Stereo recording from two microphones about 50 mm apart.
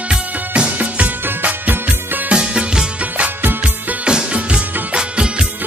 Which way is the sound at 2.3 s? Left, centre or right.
Centre.